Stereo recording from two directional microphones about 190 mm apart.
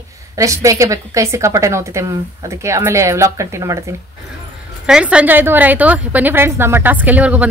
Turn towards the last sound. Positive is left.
turn(degrees=-10)  # may be behind; listen again after turning